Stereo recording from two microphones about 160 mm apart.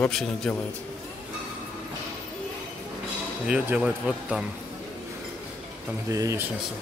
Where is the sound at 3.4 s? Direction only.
5° right (ahead or behind).